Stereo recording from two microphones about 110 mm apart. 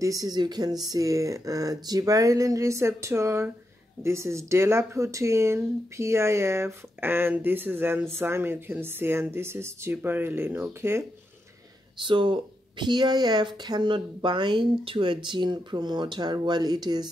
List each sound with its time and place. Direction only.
0.0 s speech: 35° right (ahead or behind)
12.0 s speech: 50° right (ahead or behind)